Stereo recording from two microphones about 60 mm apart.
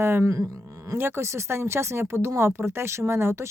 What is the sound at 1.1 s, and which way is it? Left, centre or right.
A woman's voice, right.